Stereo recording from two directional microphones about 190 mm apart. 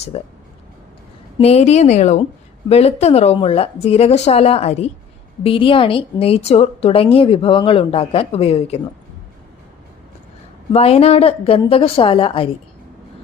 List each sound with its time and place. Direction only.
0.1 s a woman's voice: 30° left (ahead or behind)
1.4 s a woman's voice: 35° left (ahead or behind)
10.7 s speech: 30° left (ahead or behind)